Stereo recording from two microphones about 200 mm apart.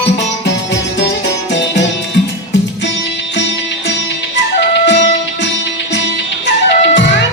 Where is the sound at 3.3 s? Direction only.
65° left (ahead or behind).